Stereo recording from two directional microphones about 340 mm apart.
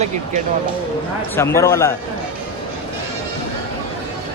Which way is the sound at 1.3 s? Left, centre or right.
Centre.